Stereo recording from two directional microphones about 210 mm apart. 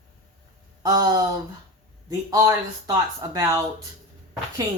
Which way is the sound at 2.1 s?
15° right (ahead or behind).